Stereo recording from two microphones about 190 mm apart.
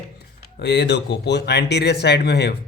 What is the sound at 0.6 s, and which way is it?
Speech, 60° left (ahead or behind).